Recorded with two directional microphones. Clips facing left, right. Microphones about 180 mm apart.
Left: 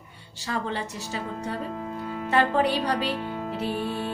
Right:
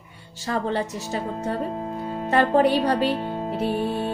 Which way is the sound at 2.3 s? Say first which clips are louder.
Right 4 dB; 45° right (ahead or behind).